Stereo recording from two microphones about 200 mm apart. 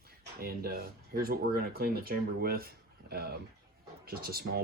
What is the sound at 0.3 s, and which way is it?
Speech, 50° right (ahead or behind).